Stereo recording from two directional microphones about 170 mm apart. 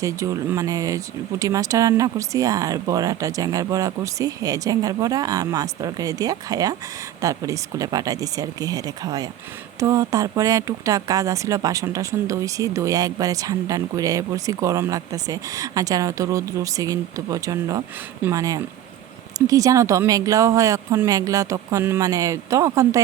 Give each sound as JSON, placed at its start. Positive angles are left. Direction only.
{"t": 0.0, "sound": "speech", "side_deg": -20}